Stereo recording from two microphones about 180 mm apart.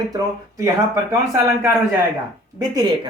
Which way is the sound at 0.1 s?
20° right (ahead or behind).